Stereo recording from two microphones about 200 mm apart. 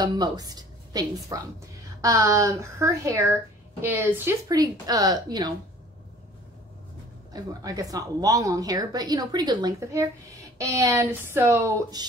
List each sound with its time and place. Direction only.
0.0 s a woman's voice: 20° right (ahead or behind)
7.3 s a woman's voice: 15° right (ahead or behind)